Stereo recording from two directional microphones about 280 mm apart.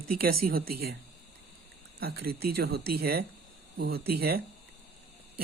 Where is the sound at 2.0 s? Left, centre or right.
Right.